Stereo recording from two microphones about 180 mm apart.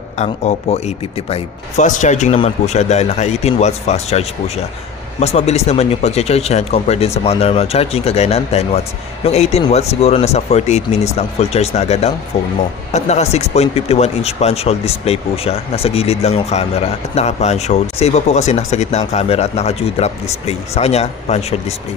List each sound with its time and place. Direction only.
0.2 s speech: 40° left (ahead or behind)